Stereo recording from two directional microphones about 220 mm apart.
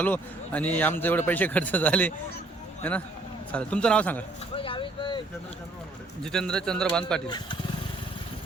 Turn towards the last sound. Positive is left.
turn(degrees=20)  # may be behind; listen again after turning